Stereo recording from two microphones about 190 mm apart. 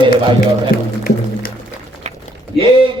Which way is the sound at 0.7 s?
50° left (ahead or behind).